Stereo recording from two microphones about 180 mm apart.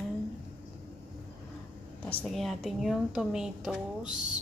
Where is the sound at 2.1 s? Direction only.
5° left (ahead or behind).